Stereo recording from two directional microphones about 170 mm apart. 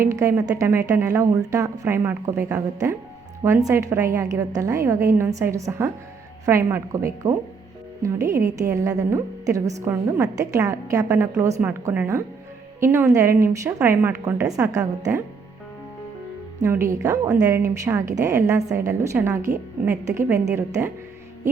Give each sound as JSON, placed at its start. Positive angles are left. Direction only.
{"t": 0.0, "sound": "a woman's voice", "side_deg": -15}
{"t": 16.6, "sound": "a woman's voice", "side_deg": -15}